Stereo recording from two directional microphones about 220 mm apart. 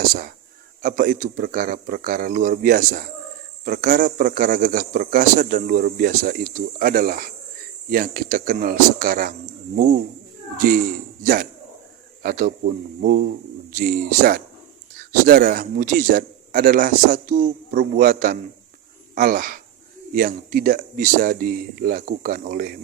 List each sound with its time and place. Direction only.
0.8 s a man's voice: 40° right (ahead or behind)